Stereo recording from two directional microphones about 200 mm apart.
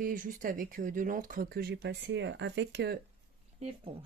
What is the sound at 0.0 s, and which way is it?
Speech, 40° right (ahead or behind).